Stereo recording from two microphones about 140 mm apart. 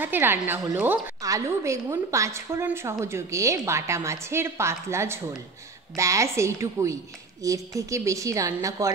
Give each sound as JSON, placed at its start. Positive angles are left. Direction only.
{"t": 0.0, "sound": "a woman's voice", "side_deg": -15}